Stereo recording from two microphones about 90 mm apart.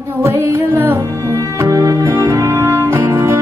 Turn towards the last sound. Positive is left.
turn(degrees=-30)  # may be behind; listen again after turning